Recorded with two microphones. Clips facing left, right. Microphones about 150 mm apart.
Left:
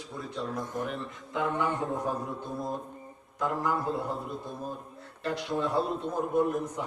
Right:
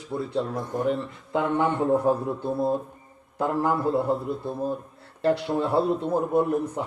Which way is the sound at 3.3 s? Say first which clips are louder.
Right 5 dB; 30° right (ahead or behind).